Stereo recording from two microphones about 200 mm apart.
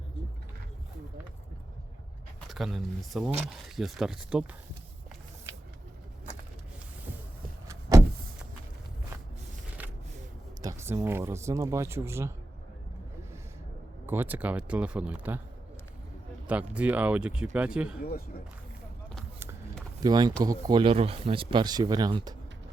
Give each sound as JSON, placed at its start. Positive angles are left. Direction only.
{"t": 2.5, "sound": "speech", "side_deg": 0}
{"t": 7.7, "sound": "vehicle", "side_deg": -15}
{"t": 10.6, "sound": "a sound", "side_deg": -15}
{"t": 11.0, "sound": "speech", "side_deg": -10}
{"t": 14.1, "sound": "speech", "side_deg": -10}
{"t": 16.7, "sound": "speech", "side_deg": -5}
{"t": 20.0, "sound": "speech", "side_deg": -20}